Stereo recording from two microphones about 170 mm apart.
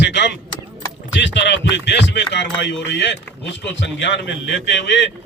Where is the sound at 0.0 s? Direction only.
90° left.